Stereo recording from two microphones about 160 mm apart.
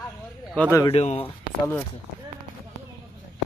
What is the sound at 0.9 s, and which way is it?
Speech, 40° left (ahead or behind).